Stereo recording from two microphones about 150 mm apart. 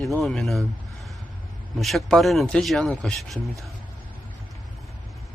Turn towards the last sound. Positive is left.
turn(degrees=0)  # may be behind; listen again after turning